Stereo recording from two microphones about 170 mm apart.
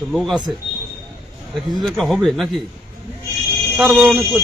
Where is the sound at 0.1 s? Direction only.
Centre (ahead or behind).